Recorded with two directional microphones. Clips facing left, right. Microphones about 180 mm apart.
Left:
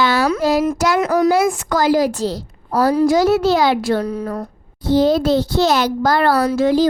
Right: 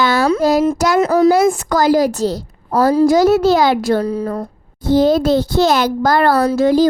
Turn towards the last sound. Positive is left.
turn(degrees=-40)  # may be behind; listen again after turning